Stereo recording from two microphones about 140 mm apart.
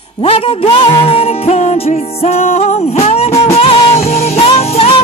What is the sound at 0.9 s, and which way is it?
Music, 45° left (ahead or behind).